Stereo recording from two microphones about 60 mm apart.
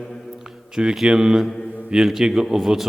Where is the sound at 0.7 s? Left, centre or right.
Centre.